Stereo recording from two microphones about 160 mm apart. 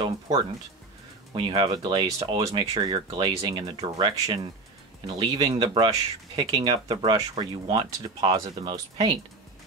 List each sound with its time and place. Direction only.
1.3 s speech: 30° right (ahead or behind)